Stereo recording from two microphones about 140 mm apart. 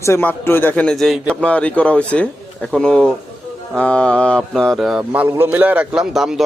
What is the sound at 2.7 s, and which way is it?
Mantra, 5° left (ahead or behind).